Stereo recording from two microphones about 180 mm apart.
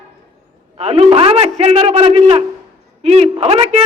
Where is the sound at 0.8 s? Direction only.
35° right (ahead or behind).